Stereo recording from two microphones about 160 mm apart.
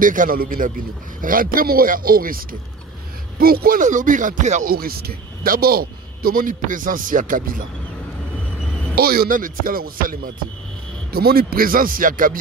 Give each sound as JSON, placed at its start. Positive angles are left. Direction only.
{"t": 0.0, "sound": "speech", "side_deg": -55}
{"t": 4.7, "sound": "speech", "side_deg": -70}
{"t": 8.9, "sound": "speech", "side_deg": -70}
{"t": 11.1, "sound": "speech", "side_deg": -75}